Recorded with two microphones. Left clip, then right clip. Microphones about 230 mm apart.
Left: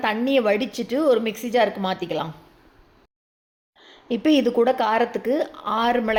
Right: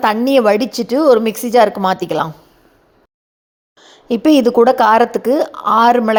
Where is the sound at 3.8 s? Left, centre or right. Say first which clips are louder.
Right 8 dB; right.